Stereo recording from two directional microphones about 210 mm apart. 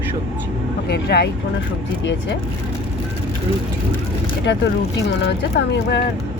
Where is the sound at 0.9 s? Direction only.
50° left (ahead or behind).